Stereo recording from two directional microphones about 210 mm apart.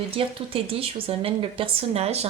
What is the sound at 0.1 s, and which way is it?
Speech, 25° right (ahead or behind).